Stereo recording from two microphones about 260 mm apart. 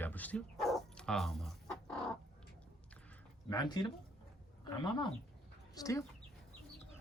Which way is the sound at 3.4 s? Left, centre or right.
Centre.